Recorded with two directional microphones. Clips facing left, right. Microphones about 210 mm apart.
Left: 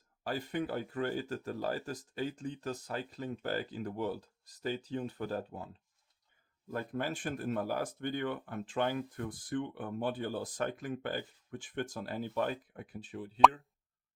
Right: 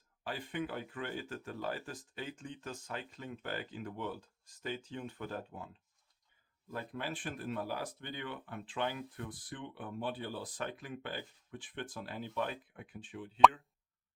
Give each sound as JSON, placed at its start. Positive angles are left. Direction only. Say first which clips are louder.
{"t": 0.3, "sound": "speech", "louder": "left 4 dB", "side_deg": 40}
{"t": 6.7, "sound": "speech", "louder": "left 5 dB", "side_deg": 45}